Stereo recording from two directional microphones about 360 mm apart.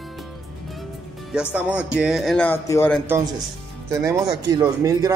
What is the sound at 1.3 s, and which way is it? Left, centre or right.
Speech, centre.